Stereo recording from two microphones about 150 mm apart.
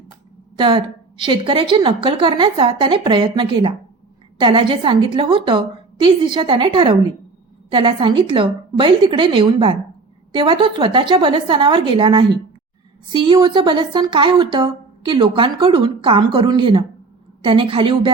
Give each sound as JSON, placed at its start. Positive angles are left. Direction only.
{"t": 0.5, "sound": "a woman's voice", "side_deg": -35}